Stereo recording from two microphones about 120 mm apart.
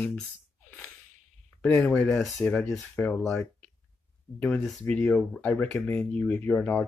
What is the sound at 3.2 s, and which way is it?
Speech, centre (ahead or behind).